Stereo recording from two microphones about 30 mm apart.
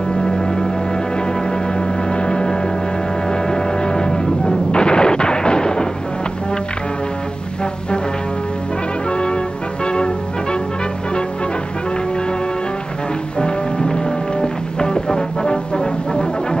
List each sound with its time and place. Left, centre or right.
0.1 s music: centre
1.8 s music: left
3.3 s artillery fire: left
9.8 s music: left
14.4 s music: left